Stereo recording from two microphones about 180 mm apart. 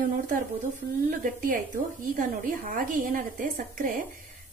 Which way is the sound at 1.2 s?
50° right (ahead or behind).